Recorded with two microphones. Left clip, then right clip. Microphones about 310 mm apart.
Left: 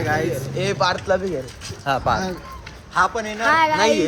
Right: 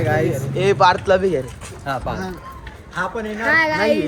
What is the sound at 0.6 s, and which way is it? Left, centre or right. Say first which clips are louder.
Speech: right 7 dB; right.